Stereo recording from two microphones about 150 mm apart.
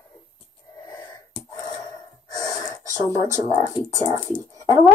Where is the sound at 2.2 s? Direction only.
25° left (ahead or behind).